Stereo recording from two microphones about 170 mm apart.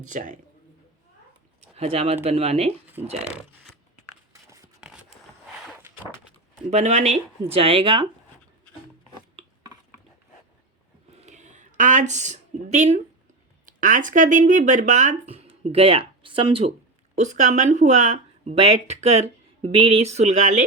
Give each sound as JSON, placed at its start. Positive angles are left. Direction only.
{"t": 0.0, "sound": "speech", "side_deg": -50}
{"t": 1.7, "sound": "speech", "side_deg": -35}
{"t": 3.2, "sound": "speech", "side_deg": 0}
{"t": 6.7, "sound": "speech", "side_deg": -40}
{"t": 11.2, "sound": "a sound", "side_deg": -45}
{"t": 13.7, "sound": "speech", "side_deg": -50}
{"t": 17.2, "sound": "speech", "side_deg": -45}